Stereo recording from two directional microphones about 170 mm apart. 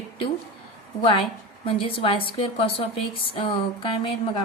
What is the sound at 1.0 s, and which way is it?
A woman's voice, 30° left (ahead or behind).